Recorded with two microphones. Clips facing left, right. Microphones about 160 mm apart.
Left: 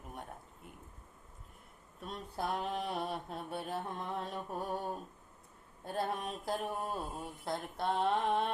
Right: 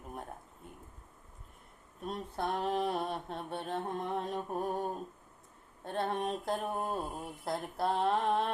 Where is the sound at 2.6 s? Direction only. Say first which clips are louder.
Right 5 dB; 35° right (ahead or behind).